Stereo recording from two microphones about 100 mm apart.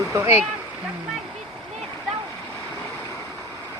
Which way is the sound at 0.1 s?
30° right (ahead or behind).